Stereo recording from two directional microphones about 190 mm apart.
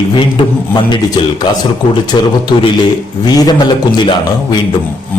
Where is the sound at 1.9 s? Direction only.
25° left (ahead or behind).